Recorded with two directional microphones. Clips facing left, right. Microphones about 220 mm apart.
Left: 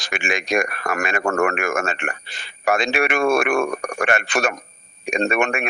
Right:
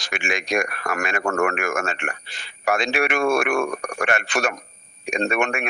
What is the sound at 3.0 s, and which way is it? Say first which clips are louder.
Speech: left 1 dB; 55° left (ahead or behind).